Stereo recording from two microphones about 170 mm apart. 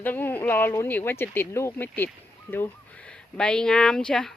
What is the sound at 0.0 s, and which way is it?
Speech, 10° left (ahead or behind).